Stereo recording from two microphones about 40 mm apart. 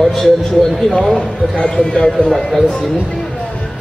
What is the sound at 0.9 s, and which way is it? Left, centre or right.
Speech, left.